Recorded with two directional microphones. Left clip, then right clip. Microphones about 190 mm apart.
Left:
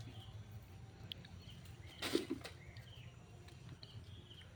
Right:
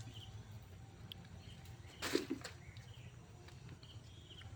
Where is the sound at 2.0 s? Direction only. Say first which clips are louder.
Even; 40° left (ahead or behind).